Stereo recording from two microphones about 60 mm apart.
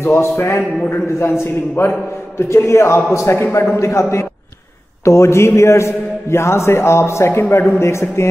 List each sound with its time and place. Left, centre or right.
0.0 s a man's voice: left
1.8 s a man's voice: left